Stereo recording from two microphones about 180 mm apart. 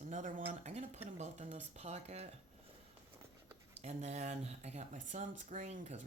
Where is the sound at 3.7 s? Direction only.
40° right (ahead or behind).